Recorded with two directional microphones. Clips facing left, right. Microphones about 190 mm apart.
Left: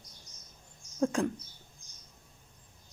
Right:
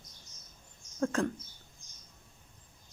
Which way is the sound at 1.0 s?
15° left (ahead or behind).